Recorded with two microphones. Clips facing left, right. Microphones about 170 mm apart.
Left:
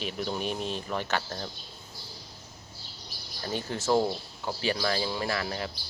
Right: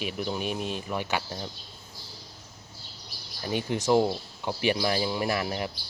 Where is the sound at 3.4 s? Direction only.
15° right (ahead or behind).